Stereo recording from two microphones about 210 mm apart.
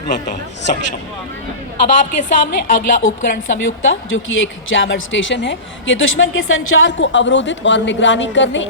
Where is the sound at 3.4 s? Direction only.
70° left (ahead or behind).